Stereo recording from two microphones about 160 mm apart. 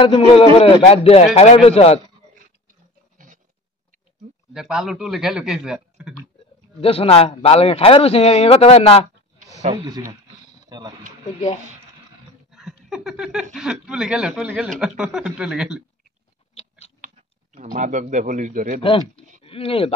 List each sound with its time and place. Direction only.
0.0 s a man's voice: 35° left (ahead or behind)
3.2 s roaring cats: 55° right (ahead or behind)
4.6 s speech: 5° right (ahead or behind)
6.8 s a man's voice: 35° left (ahead or behind)
9.8 s speech: 25° right (ahead or behind)
12.4 s speech: 5° right (ahead or behind)
16.6 s chewing: 40° left (ahead or behind)
17.0 s speech: 50° right (ahead or behind)
18.8 s a man's voice: 35° left (ahead or behind)